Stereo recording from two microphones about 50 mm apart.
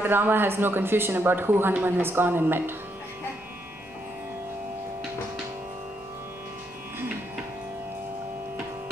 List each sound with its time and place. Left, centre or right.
0.0 s speech: right